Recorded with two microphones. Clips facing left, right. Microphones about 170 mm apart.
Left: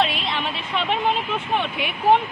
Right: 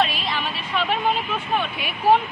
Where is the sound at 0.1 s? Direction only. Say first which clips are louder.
Left 1 dB; 25° left (ahead or behind).